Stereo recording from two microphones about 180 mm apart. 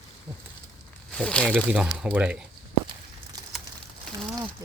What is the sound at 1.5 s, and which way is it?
Speech, 5° right (ahead or behind).